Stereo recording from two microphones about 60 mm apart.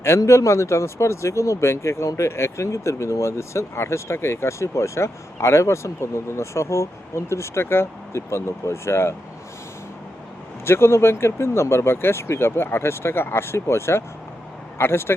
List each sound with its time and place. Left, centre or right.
0.2 s speech: left
10.7 s speech: left